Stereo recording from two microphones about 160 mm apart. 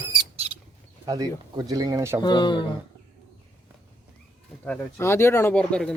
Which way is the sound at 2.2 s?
25° left (ahead or behind).